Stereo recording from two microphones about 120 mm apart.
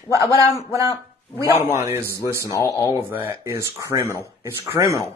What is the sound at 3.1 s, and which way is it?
Speech, 20° right (ahead or behind).